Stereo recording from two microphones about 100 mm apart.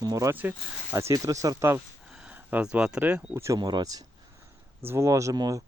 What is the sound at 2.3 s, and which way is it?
Speech, 15° right (ahead or behind).